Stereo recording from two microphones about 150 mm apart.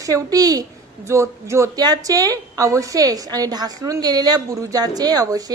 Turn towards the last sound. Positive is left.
turn(degrees=-25)  # may be behind; listen again after turning